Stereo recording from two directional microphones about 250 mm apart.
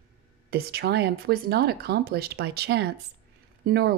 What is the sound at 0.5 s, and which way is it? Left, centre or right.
A woman's voice, right.